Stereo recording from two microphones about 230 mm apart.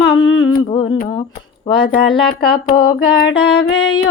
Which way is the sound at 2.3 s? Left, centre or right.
Left.